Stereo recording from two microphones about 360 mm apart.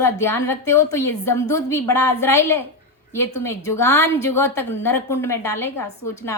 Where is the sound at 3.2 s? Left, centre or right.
Left.